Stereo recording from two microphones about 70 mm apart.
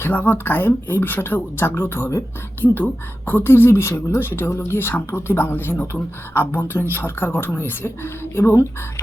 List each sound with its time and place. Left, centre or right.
0.0 s speech: left